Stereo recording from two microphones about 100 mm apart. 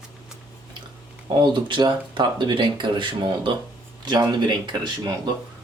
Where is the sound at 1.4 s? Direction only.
50° right (ahead or behind).